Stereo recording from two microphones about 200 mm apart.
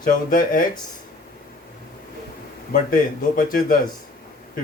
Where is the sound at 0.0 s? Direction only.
45° left (ahead or behind).